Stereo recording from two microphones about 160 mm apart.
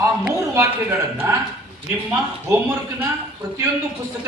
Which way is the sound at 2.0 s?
15° right (ahead or behind).